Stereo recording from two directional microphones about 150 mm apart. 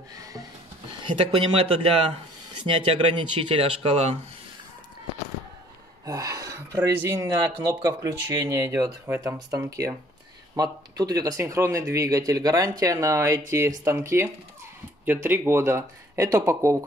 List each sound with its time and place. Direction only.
0.1 s a sound: 25° right (ahead or behind)
1.0 s speech: 35° right (ahead or behind)
6.0 s speech: 25° right (ahead or behind)